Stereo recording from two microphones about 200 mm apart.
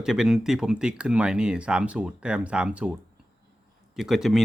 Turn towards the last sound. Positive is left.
turn(degrees=0)  # may be behind; listen again after turning